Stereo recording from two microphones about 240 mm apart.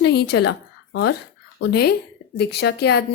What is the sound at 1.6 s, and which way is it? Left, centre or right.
Speech, left.